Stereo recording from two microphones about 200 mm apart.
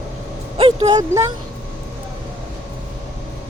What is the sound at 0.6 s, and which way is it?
Vehicle, 25° right (ahead or behind).